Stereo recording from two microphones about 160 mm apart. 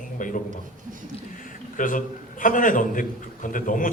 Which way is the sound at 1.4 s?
55° left (ahead or behind).